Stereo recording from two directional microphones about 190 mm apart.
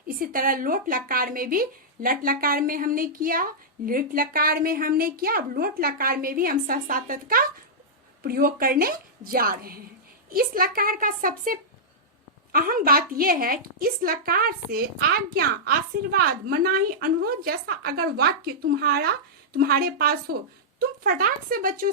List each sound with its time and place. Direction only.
0.2 s speech: 50° right (ahead or behind)